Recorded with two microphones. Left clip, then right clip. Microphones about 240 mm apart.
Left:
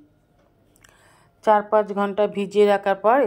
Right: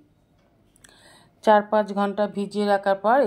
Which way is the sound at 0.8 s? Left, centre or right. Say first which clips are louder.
Right 3 dB; left.